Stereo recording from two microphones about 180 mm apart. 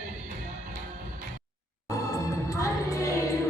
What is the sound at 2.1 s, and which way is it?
Music, 20° left (ahead or behind).